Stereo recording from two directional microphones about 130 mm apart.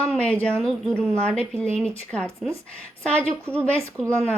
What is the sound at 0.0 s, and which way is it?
Speech, 10° left (ahead or behind).